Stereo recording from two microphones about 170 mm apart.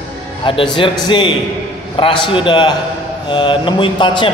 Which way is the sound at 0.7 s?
30° left (ahead or behind).